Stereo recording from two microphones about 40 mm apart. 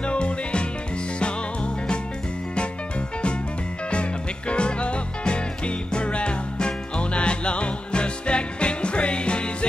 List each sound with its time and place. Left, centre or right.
0.0 s music: left
3.9 s music: left